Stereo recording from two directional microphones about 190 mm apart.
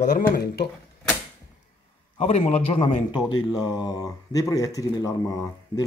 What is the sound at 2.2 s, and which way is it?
Speech, 35° left (ahead or behind).